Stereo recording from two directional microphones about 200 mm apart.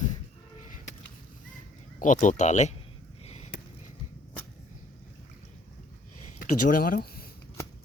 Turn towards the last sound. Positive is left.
turn(degrees=50)  # may be behind; listen again after turning